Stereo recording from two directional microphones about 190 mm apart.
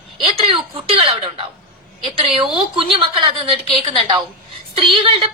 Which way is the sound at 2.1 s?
30° right (ahead or behind).